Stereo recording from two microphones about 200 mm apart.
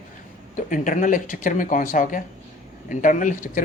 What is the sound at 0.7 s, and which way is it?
Speech, 40° left (ahead or behind).